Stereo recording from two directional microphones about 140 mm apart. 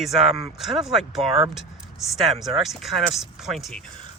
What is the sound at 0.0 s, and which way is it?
Speech, centre (ahead or behind).